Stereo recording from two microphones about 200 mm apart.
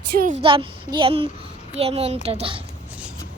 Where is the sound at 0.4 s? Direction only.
25° right (ahead or behind).